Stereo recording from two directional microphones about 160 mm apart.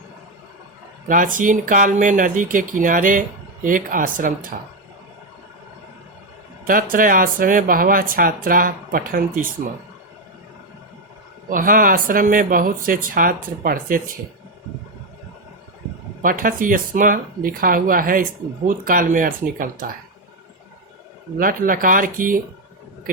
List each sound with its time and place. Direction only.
1.0 s speech: 55° right (ahead or behind)
6.7 s speech: 60° right (ahead or behind)
11.4 s speech: 60° right (ahead or behind)
16.2 s speech: 60° right (ahead or behind)
21.3 s speech: 60° right (ahead or behind)